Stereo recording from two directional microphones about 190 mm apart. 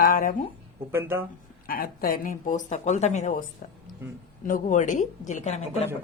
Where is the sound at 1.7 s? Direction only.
50° left (ahead or behind).